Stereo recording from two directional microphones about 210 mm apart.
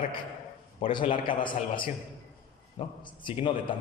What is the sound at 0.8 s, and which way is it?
A man's voice, 25° left (ahead or behind).